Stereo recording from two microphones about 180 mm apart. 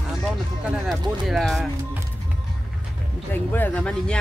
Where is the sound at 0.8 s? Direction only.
Centre (ahead or behind).